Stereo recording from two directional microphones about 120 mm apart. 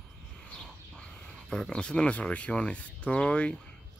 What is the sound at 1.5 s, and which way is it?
Speech, 5° left (ahead or behind).